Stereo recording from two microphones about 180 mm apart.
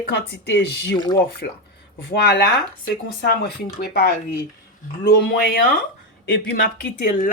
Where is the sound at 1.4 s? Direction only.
65° left (ahead or behind).